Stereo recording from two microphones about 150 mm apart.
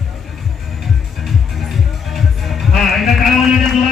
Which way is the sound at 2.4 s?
Centre (ahead or behind).